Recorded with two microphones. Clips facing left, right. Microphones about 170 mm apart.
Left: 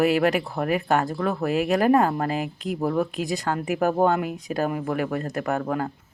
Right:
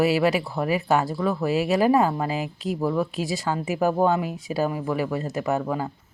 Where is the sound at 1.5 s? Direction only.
55° left (ahead or behind).